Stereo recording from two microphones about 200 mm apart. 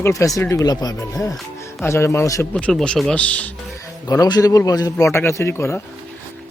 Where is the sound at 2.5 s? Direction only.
5° left (ahead or behind).